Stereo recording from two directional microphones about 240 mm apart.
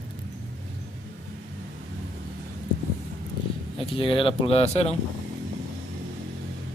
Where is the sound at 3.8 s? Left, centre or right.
Left.